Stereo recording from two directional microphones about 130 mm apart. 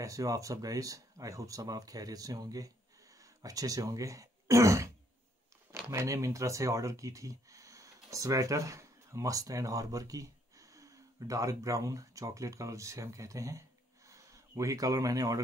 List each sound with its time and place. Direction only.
0.0 s speech: 25° right (ahead or behind)